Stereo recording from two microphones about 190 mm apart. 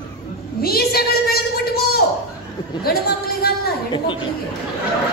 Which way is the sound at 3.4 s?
55° left (ahead or behind).